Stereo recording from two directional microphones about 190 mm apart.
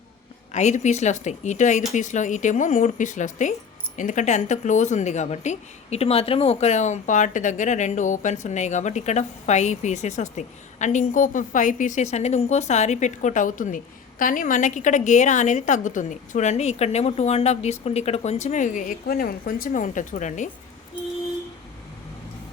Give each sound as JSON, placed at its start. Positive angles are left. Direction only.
{"t": 0.5, "sound": "a woman's voice", "side_deg": 40}